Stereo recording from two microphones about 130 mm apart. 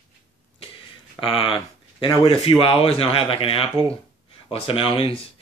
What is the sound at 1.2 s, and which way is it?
A man's voice, 45° left (ahead or behind).